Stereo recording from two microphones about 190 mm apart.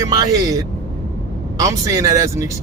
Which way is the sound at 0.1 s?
20° right (ahead or behind).